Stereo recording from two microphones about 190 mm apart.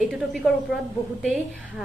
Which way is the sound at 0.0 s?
Centre (ahead or behind).